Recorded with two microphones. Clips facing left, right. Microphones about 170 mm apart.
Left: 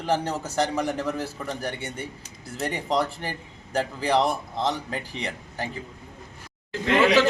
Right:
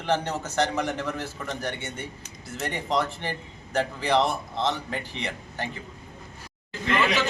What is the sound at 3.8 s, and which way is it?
Speech, 10° left (ahead or behind).